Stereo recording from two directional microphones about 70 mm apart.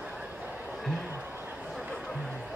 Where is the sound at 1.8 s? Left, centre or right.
Centre.